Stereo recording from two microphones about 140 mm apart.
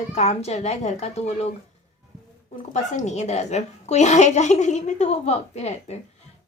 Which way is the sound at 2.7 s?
55° left (ahead or behind).